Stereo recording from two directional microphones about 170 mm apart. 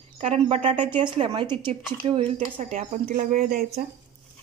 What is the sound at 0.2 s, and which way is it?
A woman's voice, 35° right (ahead or behind).